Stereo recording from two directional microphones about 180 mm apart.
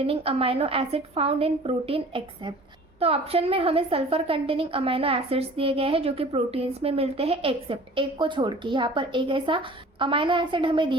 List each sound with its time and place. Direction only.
0.0 s a woman's voice: 30° right (ahead or behind)